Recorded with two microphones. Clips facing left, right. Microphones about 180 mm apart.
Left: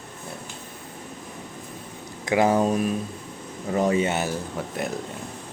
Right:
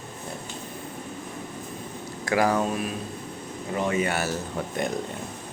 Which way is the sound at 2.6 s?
40° left (ahead or behind).